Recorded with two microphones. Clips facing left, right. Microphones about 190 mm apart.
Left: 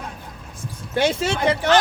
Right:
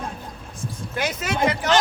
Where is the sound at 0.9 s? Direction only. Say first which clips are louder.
Left 6 dB; 30° left (ahead or behind).